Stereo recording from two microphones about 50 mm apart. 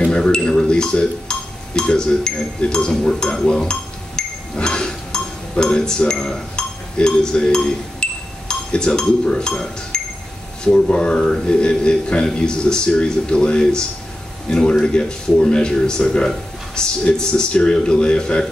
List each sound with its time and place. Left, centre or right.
0.0 s speech: centre
4.2 s a sound: centre
10.6 s speech: centre